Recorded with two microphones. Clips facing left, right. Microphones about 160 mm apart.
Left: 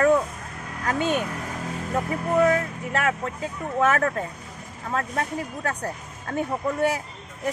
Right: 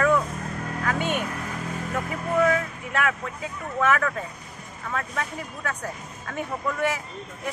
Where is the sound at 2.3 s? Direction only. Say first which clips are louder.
Left 2 dB; 35° left (ahead or behind).